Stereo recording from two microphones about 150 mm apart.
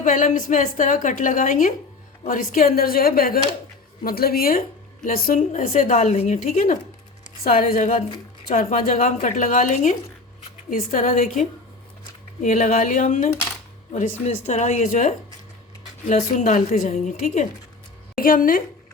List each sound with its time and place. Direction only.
0.0 s a woman's voice: 55° left (ahead or behind)
7.4 s a woman's voice: 70° left (ahead or behind)
16.9 s speech: 55° left (ahead or behind)
18.2 s a woman's voice: 65° left (ahead or behind)